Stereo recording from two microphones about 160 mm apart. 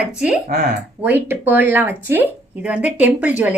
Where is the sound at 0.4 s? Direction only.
50° right (ahead or behind).